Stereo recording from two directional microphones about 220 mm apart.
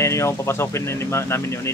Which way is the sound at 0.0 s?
15° left (ahead or behind).